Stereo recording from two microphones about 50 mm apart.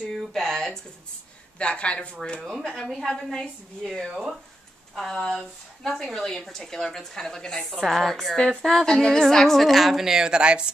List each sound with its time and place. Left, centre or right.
0.2 s speech: centre
1.6 s a woman's voice: left
2.4 s a woman's voice: centre